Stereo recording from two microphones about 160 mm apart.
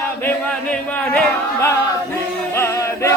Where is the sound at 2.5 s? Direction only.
15° left (ahead or behind).